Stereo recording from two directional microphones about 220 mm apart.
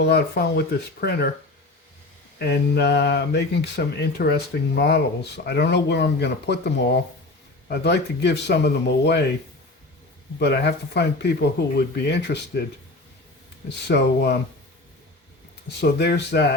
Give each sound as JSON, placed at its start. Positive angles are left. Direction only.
{"t": 0.0, "sound": "speech", "side_deg": 45}
{"t": 2.4, "sound": "speech", "side_deg": 45}
{"t": 10.4, "sound": "speech", "side_deg": 50}
{"t": 13.8, "sound": "speech", "side_deg": 50}
{"t": 15.8, "sound": "speech", "side_deg": 50}